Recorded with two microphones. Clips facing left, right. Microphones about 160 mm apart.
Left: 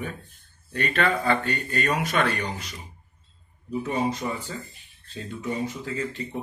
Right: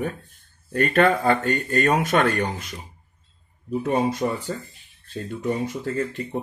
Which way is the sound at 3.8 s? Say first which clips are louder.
Right 4 dB; 55° right (ahead or behind).